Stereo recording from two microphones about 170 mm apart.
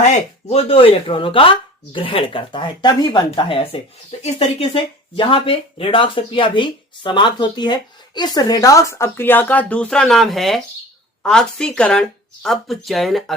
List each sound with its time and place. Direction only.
0.0 s speech: 40° left (ahead or behind); by 13.3 s centre (ahead or behind)